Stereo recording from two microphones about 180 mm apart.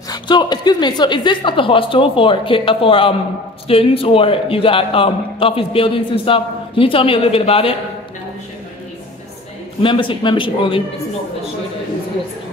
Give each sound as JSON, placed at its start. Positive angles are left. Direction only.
{"t": 0.1, "sound": "a woman's voice", "side_deg": 25}
{"t": 9.8, "sound": "a woman's voice", "side_deg": 30}